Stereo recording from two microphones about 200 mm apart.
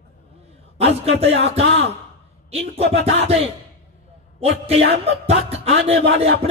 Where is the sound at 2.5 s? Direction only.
30° right (ahead or behind).